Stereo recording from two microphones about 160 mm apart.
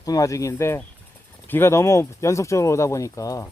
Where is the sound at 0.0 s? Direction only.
20° left (ahead or behind).